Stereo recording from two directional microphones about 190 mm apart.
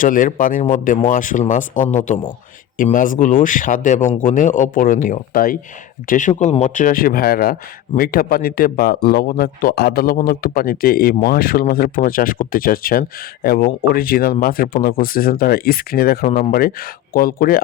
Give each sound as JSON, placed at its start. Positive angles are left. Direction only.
{"t": 0.0, "sound": "speech", "side_deg": 45}